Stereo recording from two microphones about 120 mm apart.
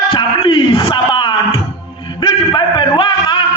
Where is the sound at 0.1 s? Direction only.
45° left (ahead or behind).